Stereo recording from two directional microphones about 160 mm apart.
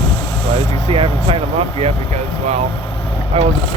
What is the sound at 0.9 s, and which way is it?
Speech, 35° right (ahead or behind).